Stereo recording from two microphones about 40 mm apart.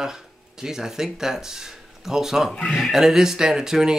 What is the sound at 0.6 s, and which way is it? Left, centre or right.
Speech, centre.